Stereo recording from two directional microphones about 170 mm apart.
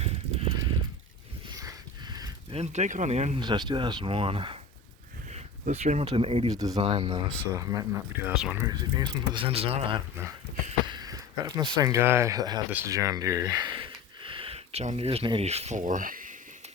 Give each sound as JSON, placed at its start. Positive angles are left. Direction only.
{"t": 0.0, "sound": "livestock", "side_deg": -35}
{"t": 1.5, "sound": "a sound", "side_deg": -25}
{"t": 2.5, "sound": "speech", "side_deg": -40}
{"t": 3.4, "sound": "speech", "side_deg": -25}
{"t": 6.5, "sound": "speech", "side_deg": -20}
{"t": 6.7, "sound": "speech", "side_deg": -35}
{"t": 7.5, "sound": "speech", "side_deg": -20}
{"t": 8.3, "sound": "speech", "side_deg": -5}
{"t": 8.6, "sound": "speech", "side_deg": -25}
{"t": 10.9, "sound": "speech", "side_deg": -20}